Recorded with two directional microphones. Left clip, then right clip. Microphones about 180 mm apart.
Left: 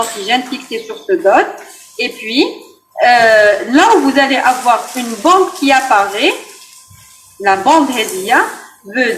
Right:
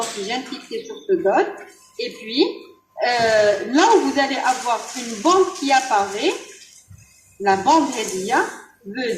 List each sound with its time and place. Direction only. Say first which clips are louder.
0.3 s speech: left 11 dB; 20° left (ahead or behind)
7.4 s speech: left 6 dB; 20° left (ahead or behind)